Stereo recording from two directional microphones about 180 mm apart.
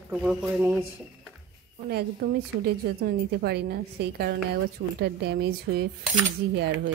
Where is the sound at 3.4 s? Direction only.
65° right (ahead or behind).